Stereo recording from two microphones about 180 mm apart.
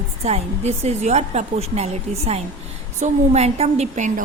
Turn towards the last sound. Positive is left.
turn(degrees=-40)  # may be behind; listen again after turning